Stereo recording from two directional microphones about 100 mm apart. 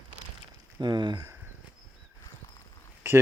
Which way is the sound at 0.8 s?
45° right (ahead or behind).